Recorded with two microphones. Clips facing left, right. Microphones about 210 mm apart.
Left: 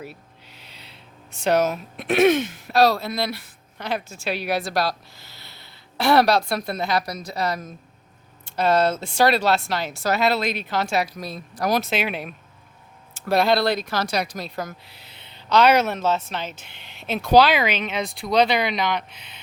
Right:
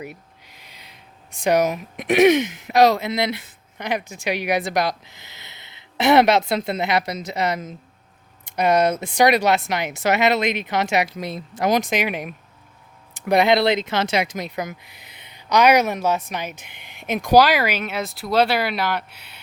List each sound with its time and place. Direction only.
1.4 s speech: 15° right (ahead or behind)